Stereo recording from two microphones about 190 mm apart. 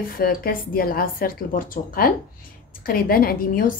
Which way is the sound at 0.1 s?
50° left (ahead or behind).